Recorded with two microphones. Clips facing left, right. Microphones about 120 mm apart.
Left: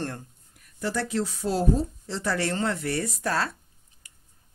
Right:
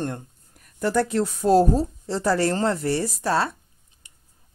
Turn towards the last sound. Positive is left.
turn(degrees=-25)  # may be behind; listen again after turning